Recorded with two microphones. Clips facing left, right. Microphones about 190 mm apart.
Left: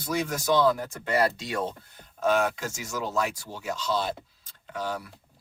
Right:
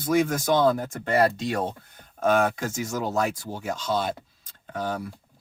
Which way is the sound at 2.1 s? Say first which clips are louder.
Right 3 dB; 50° right (ahead or behind).